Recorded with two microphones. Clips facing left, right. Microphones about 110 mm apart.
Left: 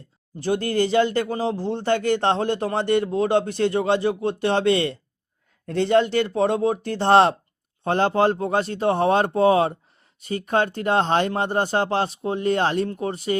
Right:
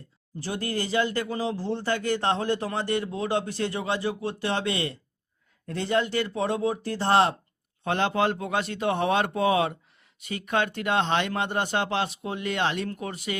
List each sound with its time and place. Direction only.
0.3 s speech: 55° left (ahead or behind)
2.1 s a man's voice: 25° left (ahead or behind)
2.4 s speech: 55° left (ahead or behind)
5.9 s speech: 30° left (ahead or behind)
6.1 s speech: 55° left (ahead or behind)
7.0 s speech: 30° left (ahead or behind)